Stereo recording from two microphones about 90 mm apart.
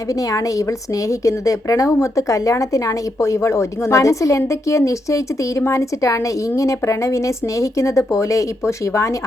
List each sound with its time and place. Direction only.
0.1 s speech: 40° left (ahead or behind)